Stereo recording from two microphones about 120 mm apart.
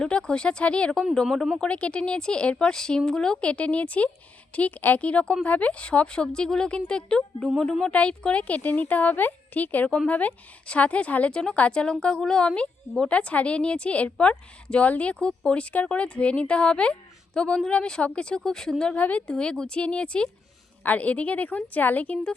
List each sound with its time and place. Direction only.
0.0 s a woman's voice: 5° left (ahead or behind)